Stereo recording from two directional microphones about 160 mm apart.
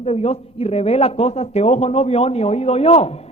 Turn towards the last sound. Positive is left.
turn(degrees=40)  # may be behind; listen again after turning